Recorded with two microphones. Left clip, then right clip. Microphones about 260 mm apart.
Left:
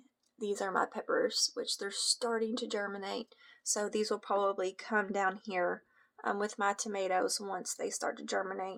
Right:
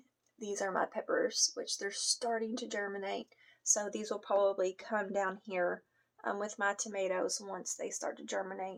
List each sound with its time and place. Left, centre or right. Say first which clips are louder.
0.3 s speech: left 2 dB; left